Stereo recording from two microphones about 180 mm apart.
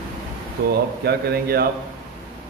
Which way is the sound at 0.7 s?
60° right (ahead or behind).